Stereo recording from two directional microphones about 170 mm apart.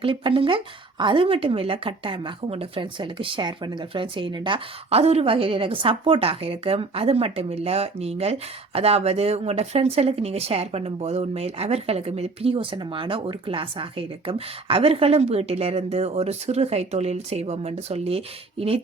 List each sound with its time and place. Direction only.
0.0 s speech: 30° right (ahead or behind)